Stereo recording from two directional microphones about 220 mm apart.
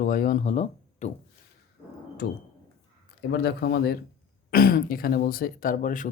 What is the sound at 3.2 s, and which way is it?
Speech, 50° left (ahead or behind).